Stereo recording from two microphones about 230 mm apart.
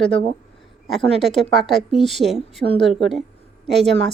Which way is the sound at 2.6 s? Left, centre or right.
Left.